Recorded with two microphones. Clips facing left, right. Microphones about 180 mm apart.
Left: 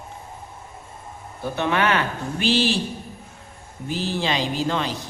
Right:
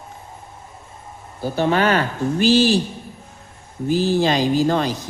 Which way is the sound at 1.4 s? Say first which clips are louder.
Right 4 dB; 35° right (ahead or behind).